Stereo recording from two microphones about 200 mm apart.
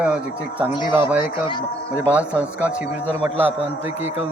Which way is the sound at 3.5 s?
30° right (ahead or behind).